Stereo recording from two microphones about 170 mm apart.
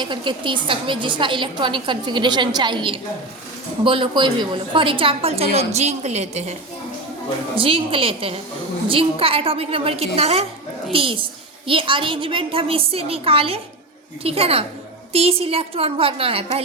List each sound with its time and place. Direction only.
0.0 s a woman's voice: 30° right (ahead or behind)